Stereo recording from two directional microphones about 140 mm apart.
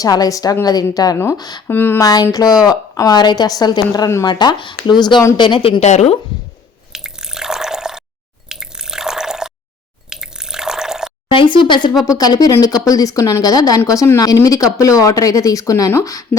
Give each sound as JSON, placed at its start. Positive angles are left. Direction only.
{"t": 0.0, "sound": "speech", "side_deg": 25}
{"t": 1.6, "sound": "a woman's voice", "side_deg": 15}
{"t": 5.8, "sound": "speech", "side_deg": 55}
{"t": 6.9, "sound": "drip", "side_deg": -5}
{"t": 11.3, "sound": "a woman's voice", "side_deg": 35}